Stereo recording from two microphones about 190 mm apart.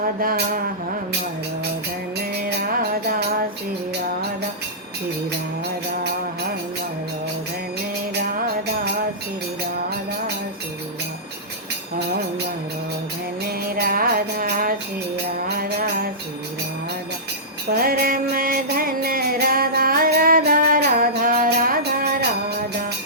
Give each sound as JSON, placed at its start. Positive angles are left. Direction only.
{"t": 0.2, "sound": "speech", "side_deg": -50}
{"t": 2.4, "sound": "music", "side_deg": -50}
{"t": 13.4, "sound": "music", "side_deg": -55}
{"t": 17.7, "sound": "music", "side_deg": -50}